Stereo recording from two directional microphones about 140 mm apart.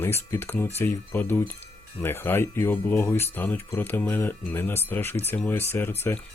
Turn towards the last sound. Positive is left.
turn(degrees=15)  # may be behind; listen again after turning